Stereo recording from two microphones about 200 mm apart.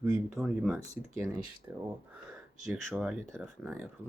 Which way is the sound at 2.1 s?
Centre (ahead or behind).